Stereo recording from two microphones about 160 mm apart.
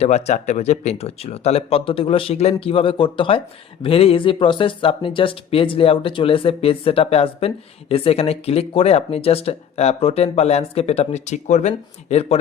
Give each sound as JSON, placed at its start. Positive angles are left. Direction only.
{"t": 0.0, "sound": "speech", "side_deg": 40}